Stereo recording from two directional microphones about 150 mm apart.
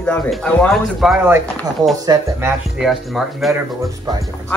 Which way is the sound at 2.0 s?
25° right (ahead or behind).